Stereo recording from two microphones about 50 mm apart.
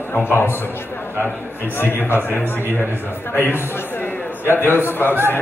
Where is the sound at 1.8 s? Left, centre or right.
Left.